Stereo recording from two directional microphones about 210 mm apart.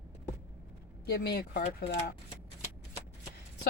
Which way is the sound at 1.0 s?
50° left (ahead or behind).